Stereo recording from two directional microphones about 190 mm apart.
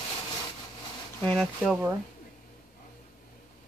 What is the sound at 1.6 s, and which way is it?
Speech, 5° right (ahead or behind).